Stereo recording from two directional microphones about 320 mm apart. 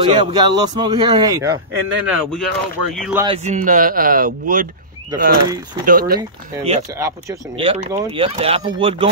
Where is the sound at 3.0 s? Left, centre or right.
Centre.